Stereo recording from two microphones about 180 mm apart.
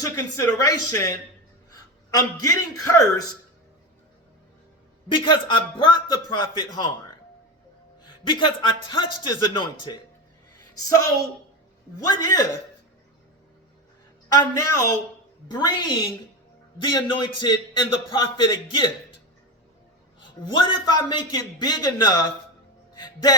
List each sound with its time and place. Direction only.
0.0 s a man's voice: 20° left (ahead or behind)
5.0 s a man's voice: 25° left (ahead or behind)
8.0 s a man's voice: 25° left (ahead or behind)
11.9 s a man's voice: 20° left (ahead or behind)
14.3 s a man's voice: 20° left (ahead or behind)
20.1 s a man's voice: 25° left (ahead or behind)
23.0 s music: 20° left (ahead or behind)